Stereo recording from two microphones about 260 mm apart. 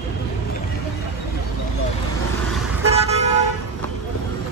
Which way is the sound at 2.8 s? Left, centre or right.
Right.